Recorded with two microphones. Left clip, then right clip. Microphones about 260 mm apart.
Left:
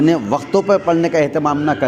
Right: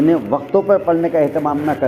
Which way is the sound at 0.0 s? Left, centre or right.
Left.